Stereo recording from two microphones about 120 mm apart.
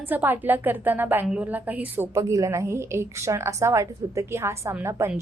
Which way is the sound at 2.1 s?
25° right (ahead or behind).